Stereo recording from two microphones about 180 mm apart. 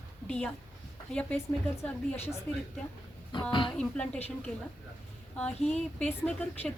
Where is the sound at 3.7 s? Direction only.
5° left (ahead or behind).